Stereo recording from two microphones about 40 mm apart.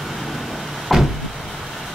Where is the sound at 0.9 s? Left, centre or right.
Centre.